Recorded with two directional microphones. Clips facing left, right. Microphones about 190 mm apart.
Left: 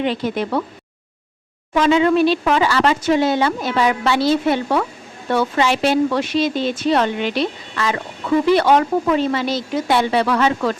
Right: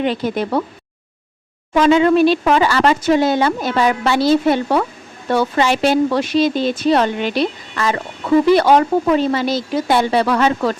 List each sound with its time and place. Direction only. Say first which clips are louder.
0.0 s speech: right 2 dB; 45° right (ahead or behind)
1.7 s a woman's voice: right 3 dB; 45° right (ahead or behind)